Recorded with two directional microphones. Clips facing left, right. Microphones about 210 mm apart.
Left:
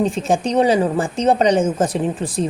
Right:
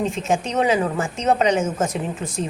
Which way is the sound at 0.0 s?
35° left (ahead or behind).